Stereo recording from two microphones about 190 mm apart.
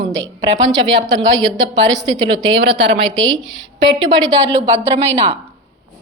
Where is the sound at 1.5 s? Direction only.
70° right (ahead or behind).